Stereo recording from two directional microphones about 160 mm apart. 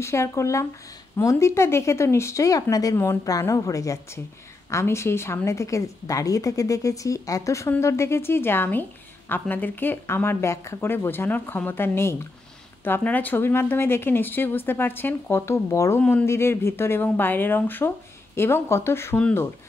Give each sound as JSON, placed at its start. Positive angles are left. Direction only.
{"t": 0.0, "sound": "speech", "side_deg": 15}